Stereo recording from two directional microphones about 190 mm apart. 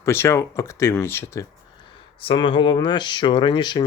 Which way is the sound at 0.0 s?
15° left (ahead or behind).